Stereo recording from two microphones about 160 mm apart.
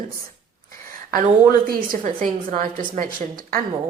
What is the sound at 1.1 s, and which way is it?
A woman's voice, 65° right (ahead or behind).